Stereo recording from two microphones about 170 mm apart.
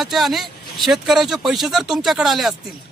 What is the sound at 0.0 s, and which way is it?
Speech, centre (ahead or behind).